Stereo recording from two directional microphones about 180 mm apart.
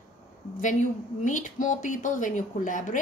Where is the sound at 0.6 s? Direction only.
45° left (ahead or behind).